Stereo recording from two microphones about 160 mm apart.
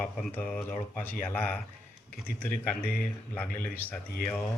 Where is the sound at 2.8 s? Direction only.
65° left (ahead or behind).